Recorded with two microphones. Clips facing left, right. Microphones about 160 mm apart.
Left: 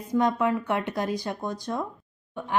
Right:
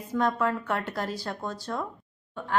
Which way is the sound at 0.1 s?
15° left (ahead or behind).